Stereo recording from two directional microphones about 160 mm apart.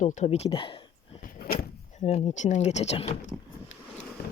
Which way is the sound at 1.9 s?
45° left (ahead or behind).